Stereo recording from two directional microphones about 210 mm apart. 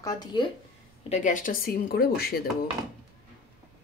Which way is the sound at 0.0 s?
20° left (ahead or behind).